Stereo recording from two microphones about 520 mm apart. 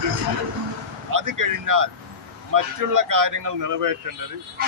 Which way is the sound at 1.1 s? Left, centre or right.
Right.